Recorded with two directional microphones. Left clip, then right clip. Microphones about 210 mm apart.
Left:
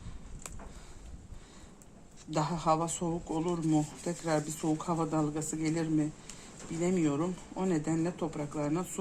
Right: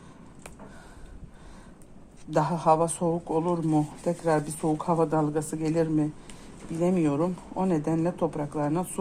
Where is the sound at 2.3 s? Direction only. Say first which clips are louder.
Right 7 dB; 30° right (ahead or behind).